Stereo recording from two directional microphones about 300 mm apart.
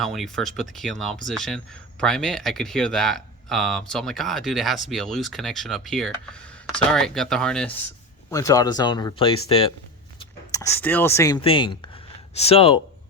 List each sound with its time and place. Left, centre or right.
0.0 s speech: centre